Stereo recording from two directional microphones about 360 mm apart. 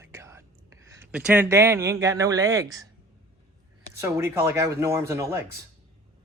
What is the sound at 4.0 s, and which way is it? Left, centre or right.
Speech, centre.